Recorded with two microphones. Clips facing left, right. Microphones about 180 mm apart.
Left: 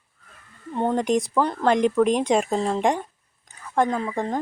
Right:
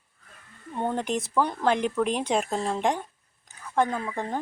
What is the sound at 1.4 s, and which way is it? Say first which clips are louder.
Speech: left 2 dB; 5° right (ahead or behind).